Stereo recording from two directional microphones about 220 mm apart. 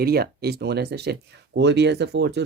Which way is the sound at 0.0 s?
45° right (ahead or behind).